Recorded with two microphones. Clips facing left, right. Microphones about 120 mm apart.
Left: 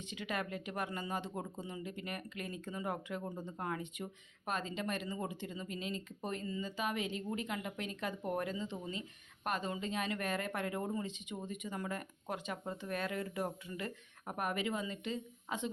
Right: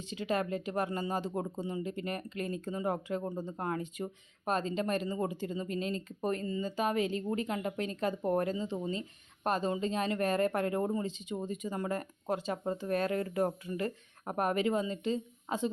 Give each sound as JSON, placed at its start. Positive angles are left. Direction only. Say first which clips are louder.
{"t": 0.0, "sound": "speech", "louder": "right 7 dB", "side_deg": -35}